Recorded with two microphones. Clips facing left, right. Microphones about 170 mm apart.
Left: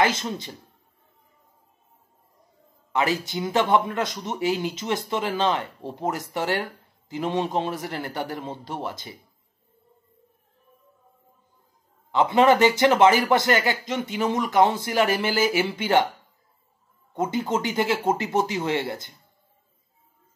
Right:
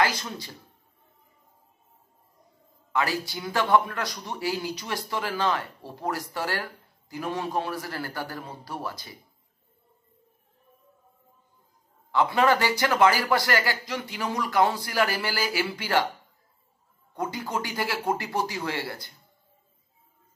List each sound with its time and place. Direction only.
0.0 s a man's voice: 20° left (ahead or behind)
2.9 s a man's voice: 20° left (ahead or behind)
12.1 s a man's voice: 20° left (ahead or behind)
17.1 s a man's voice: 20° left (ahead or behind)